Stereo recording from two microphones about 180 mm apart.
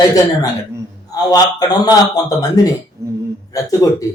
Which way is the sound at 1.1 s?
20° left (ahead or behind).